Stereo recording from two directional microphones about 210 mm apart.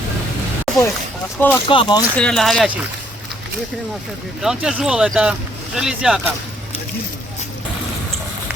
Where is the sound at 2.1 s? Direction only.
Centre (ahead or behind).